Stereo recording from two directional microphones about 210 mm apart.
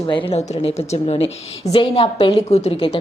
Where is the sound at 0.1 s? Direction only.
25° left (ahead or behind).